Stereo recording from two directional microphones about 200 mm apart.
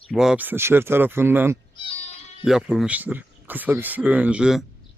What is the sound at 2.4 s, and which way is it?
Speech, centre (ahead or behind).